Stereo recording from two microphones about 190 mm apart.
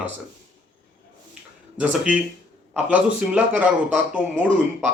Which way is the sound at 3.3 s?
5° right (ahead or behind).